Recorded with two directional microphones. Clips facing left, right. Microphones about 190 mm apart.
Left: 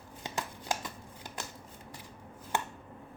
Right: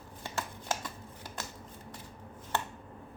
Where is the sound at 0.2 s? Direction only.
15° left (ahead or behind).